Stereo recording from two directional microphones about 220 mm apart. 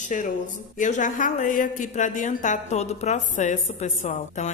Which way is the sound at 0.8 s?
35° left (ahead or behind).